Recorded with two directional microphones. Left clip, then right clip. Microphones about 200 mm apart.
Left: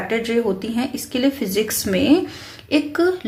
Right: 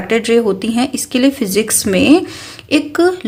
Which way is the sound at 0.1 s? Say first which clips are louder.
Right 9 dB; 40° right (ahead or behind).